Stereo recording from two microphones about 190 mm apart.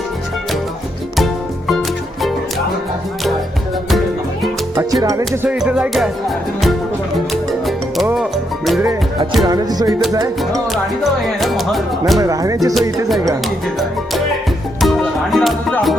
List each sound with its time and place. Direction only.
1.1 s music: centre (ahead or behind)
5.0 s music: 15° right (ahead or behind)
5.5 s speech: 5° right (ahead or behind)
8.1 s music: centre (ahead or behind)
9.5 s music: 20° right (ahead or behind)
11.3 s speech: centre (ahead or behind)
12.2 s music: 20° right (ahead or behind)
14.8 s music: centre (ahead or behind)